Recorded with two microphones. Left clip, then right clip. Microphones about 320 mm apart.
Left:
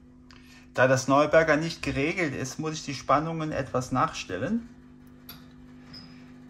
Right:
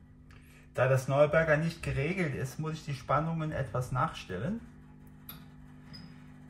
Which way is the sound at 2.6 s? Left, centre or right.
Centre.